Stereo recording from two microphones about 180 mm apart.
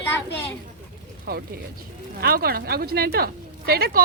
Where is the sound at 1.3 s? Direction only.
60° right (ahead or behind).